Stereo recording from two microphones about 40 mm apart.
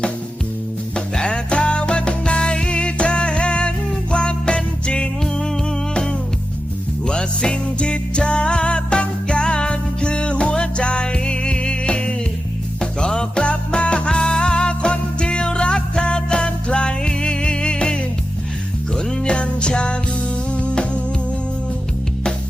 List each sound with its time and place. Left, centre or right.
0.9 s music: left
7.0 s music: left